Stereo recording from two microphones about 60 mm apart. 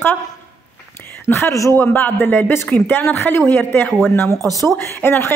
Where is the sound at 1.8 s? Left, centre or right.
Left.